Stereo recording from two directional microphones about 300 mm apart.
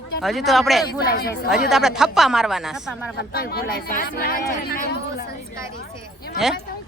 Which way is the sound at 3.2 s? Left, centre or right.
Left.